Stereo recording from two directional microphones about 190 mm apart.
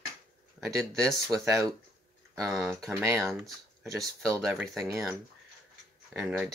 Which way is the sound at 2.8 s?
15° right (ahead or behind).